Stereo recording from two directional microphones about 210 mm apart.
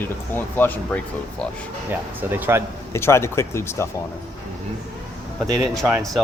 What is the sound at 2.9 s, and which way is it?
Speech, 10° left (ahead or behind).